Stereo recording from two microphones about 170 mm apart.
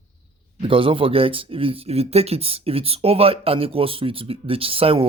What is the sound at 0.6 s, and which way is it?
Speech, 30° right (ahead or behind).